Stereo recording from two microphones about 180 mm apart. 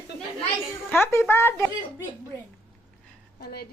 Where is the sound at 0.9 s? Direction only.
15° left (ahead or behind).